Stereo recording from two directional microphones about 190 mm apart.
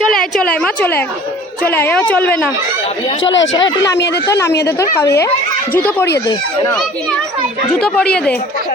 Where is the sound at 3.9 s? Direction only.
60° left (ahead or behind).